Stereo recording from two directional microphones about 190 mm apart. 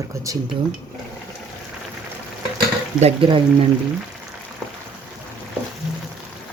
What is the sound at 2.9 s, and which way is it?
Speech, 30° right (ahead or behind).